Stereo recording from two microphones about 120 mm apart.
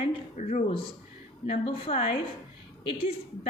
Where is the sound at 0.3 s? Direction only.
85° left.